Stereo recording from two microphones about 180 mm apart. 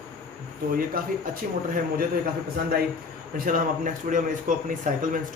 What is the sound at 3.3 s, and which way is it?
Speech, 50° right (ahead or behind).